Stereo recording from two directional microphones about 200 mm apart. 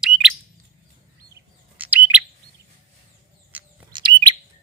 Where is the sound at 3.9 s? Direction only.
25° right (ahead or behind).